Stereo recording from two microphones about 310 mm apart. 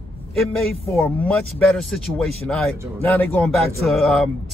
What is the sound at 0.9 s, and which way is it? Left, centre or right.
Speech, centre.